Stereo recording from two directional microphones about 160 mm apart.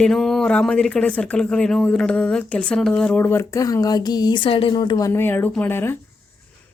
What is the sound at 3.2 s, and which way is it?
Speech, 15° left (ahead or behind).